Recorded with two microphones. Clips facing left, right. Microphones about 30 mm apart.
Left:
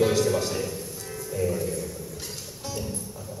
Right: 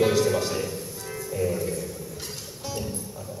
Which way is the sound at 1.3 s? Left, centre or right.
Centre.